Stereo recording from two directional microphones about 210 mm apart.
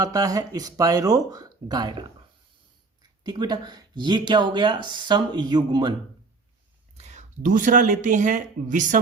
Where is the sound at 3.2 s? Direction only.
20° right (ahead or behind).